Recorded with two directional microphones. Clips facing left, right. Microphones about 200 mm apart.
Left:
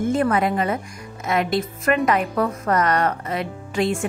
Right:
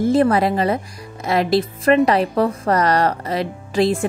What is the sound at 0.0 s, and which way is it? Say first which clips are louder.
A woman's voice: right 4 dB; 35° right (ahead or behind).